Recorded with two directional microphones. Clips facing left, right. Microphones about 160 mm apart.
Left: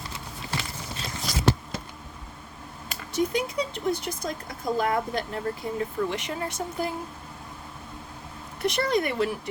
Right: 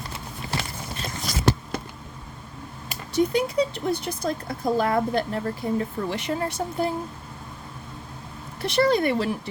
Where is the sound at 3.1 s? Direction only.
35° right (ahead or behind).